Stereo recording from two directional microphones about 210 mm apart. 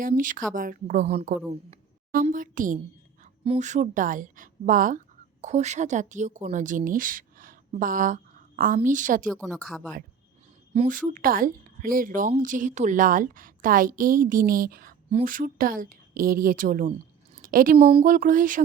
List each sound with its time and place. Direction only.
0.0 s a woman's voice: 40° right (ahead or behind)
10.8 s a woman's voice: 40° right (ahead or behind)
17.3 s a sound: 40° right (ahead or behind)
17.9 s a woman's voice: 40° right (ahead or behind)